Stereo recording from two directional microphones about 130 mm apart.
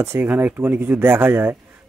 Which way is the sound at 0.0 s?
15° right (ahead or behind).